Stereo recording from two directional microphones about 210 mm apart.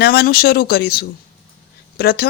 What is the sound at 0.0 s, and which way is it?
A man's voice, 50° left (ahead or behind).